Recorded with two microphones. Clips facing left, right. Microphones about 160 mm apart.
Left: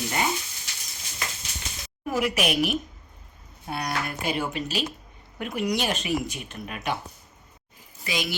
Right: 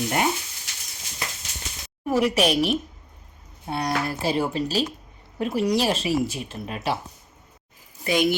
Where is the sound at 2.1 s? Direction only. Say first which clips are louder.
Right 5 dB; 30° right (ahead or behind).